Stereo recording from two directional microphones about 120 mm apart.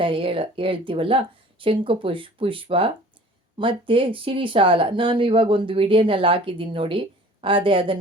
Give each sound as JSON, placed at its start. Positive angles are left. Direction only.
{"t": 0.0, "sound": "speech", "side_deg": -45}